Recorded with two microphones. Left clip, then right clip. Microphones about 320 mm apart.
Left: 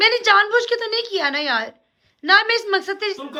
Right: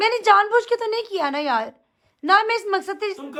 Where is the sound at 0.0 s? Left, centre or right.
Centre.